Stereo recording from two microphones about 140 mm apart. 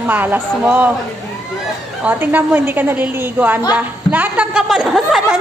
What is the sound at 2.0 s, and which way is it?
A woman's voice, 10° right (ahead or behind).